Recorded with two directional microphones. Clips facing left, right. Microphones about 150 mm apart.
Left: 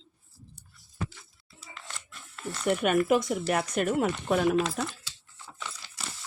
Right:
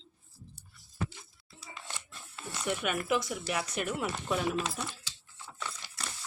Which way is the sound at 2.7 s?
50° left (ahead or behind).